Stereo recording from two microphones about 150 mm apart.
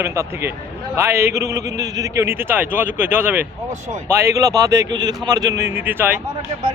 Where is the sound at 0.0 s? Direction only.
20° right (ahead or behind).